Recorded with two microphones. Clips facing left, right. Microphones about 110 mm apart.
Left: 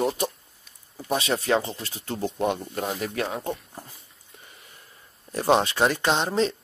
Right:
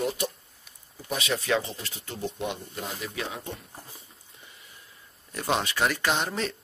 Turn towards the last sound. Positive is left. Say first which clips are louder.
# left 5 dB
turn(degrees=25)  # may be behind; listen again after turning